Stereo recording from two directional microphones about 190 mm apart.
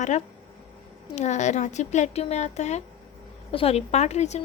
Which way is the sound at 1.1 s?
40° left (ahead or behind).